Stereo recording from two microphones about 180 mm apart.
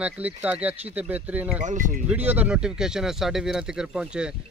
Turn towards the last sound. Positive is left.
turn(degrees=-5)  # may be behind; listen again after turning